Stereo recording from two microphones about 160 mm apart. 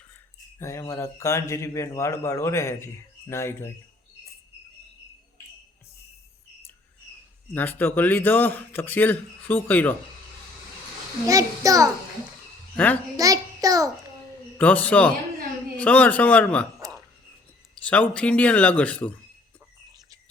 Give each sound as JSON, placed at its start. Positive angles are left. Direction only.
{"t": 0.6, "sound": "speech", "side_deg": 20}
{"t": 7.5, "sound": "speech", "side_deg": 10}
{"t": 11.3, "sound": "a child's voice", "side_deg": -20}
{"t": 12.7, "sound": "a child's voice", "side_deg": 10}
{"t": 13.1, "sound": "a sound", "side_deg": -20}
{"t": 14.6, "sound": "speech", "side_deg": 10}
{"t": 17.8, "sound": "speech", "side_deg": 10}